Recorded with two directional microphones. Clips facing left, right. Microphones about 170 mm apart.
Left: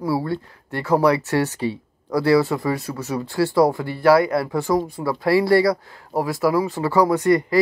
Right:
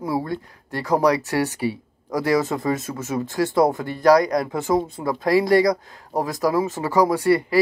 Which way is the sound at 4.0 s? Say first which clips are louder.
Even; 40° right (ahead or behind).